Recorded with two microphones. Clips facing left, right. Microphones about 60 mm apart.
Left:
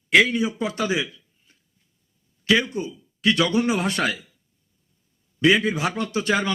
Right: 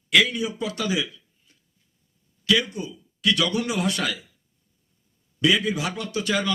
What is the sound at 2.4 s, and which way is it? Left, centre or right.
A man's voice, left.